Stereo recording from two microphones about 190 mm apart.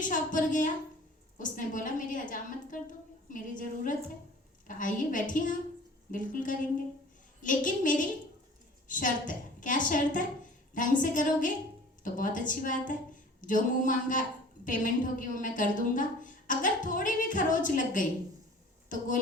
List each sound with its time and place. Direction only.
0.0 s a woman's voice: 45° left (ahead or behind)